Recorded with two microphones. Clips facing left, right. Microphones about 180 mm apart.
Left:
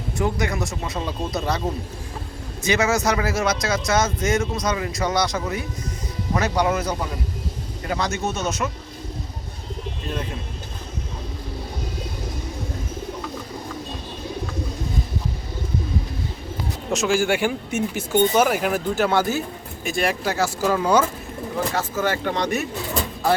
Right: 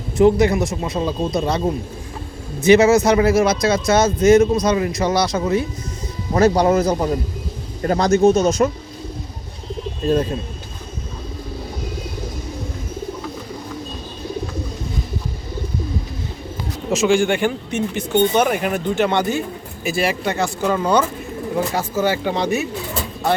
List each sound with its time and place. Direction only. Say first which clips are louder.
0.2 s speech: right 10 dB; 25° right (ahead or behind)
2.7 s speech: right 7 dB; 30° right (ahead or behind)
6.4 s speech: right 9 dB; 35° right (ahead or behind)
16.9 s speech: right 4 dB; centre (ahead or behind)
21.8 s speech: right 4 dB; 10° right (ahead or behind)